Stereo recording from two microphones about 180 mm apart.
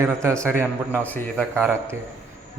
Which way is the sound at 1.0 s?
10° left (ahead or behind).